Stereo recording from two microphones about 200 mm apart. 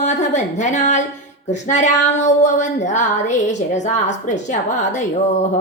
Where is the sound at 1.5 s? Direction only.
35° left (ahead or behind).